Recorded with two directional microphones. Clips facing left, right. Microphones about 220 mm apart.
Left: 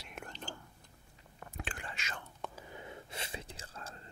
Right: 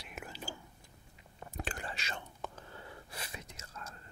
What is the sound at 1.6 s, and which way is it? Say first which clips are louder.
Whispering: right 3 dB; 40° right (ahead or behind).